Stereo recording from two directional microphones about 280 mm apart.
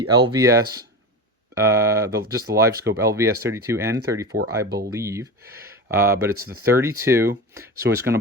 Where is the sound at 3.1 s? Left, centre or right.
Centre.